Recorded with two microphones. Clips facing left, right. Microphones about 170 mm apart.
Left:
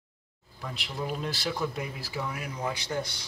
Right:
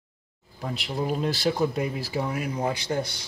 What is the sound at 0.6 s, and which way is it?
Speech, 35° right (ahead or behind).